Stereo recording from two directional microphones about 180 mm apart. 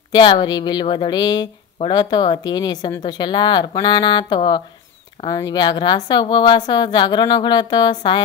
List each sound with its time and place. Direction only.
0.1 s a woman's voice: 25° left (ahead or behind)